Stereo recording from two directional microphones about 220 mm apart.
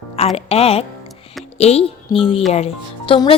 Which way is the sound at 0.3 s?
25° left (ahead or behind).